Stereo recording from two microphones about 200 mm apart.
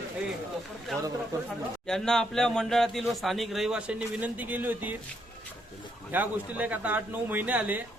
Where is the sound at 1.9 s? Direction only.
5° left (ahead or behind).